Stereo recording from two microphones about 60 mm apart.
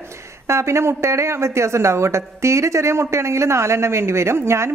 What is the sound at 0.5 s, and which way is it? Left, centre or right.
Speech, right.